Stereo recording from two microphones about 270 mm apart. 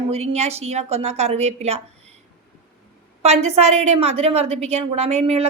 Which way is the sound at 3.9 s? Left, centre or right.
Right.